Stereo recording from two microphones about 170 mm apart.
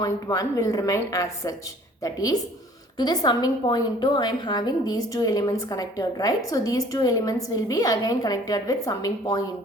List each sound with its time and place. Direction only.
0.0 s a woman's voice: 20° left (ahead or behind)